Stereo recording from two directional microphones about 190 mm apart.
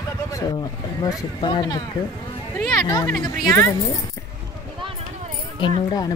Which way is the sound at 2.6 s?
15° left (ahead or behind).